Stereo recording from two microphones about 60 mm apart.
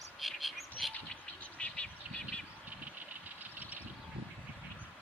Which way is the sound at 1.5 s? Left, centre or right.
Left.